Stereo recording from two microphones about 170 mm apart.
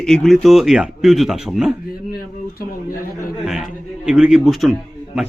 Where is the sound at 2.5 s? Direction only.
55° left (ahead or behind).